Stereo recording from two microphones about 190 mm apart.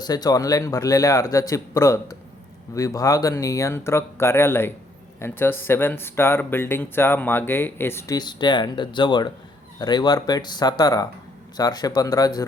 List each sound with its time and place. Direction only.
0.0 s speech: 20° left (ahead or behind)